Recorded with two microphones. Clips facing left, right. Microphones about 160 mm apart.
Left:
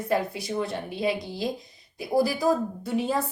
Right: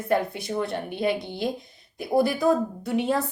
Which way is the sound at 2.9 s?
Centre (ahead or behind).